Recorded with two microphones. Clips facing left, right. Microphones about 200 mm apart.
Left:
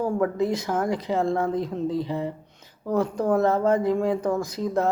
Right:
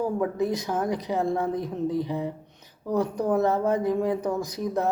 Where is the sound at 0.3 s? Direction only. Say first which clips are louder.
Left 2 dB; 15° right (ahead or behind).